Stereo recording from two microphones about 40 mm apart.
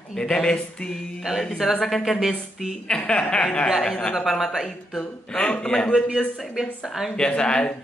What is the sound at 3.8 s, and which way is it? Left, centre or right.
Speech, centre.